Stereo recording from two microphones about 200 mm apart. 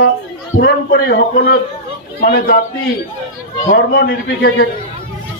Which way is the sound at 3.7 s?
50° left (ahead or behind).